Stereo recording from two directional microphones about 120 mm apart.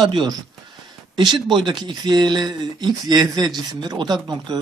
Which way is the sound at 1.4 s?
40° right (ahead or behind).